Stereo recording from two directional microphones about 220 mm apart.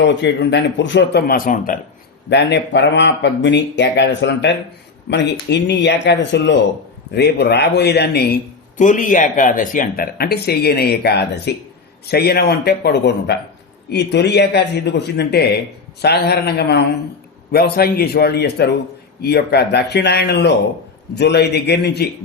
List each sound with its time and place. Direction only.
0.0 s speech: 55° left (ahead or behind)
2.3 s speech: 50° left (ahead or behind)
8.8 s speech: 35° left (ahead or behind)